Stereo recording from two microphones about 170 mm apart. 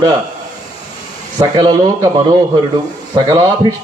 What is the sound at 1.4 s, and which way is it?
A man's voice, 25° right (ahead or behind).